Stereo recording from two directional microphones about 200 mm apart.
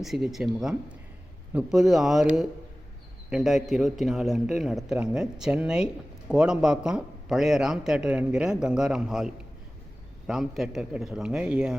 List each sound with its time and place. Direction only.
0.0 s a man's voice: centre (ahead or behind)